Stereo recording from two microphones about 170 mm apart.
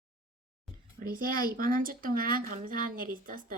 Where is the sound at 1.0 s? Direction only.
55° right (ahead or behind).